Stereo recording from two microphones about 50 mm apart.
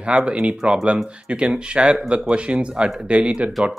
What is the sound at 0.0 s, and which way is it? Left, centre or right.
Speech, right.